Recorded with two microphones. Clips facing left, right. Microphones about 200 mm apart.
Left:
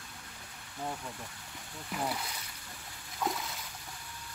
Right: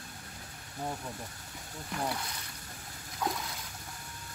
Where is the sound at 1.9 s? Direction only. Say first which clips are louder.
Even; 5° left (ahead or behind).